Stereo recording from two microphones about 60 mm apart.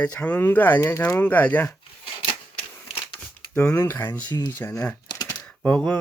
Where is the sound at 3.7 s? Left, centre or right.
Left.